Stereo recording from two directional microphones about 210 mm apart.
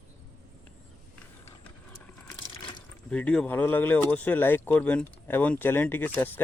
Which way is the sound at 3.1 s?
5° left (ahead or behind).